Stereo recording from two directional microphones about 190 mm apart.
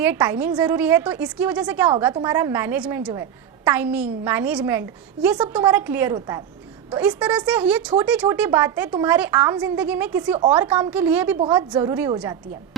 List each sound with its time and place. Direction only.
0.0 s a woman's voice: 10° right (ahead or behind)
6.9 s a woman's voice: 5° right (ahead or behind)